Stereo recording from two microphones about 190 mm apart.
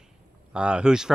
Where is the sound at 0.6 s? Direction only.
5° right (ahead or behind).